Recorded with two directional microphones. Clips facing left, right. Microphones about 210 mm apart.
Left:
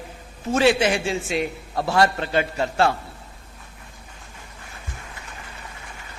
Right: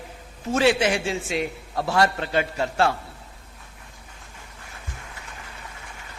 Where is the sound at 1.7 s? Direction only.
30° left (ahead or behind).